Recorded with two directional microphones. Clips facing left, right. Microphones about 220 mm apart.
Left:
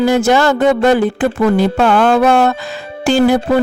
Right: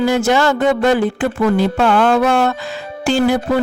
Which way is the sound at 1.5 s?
40° left (ahead or behind).